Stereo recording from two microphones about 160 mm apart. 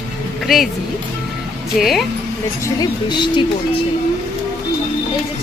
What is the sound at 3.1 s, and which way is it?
Speech, 30° left (ahead or behind).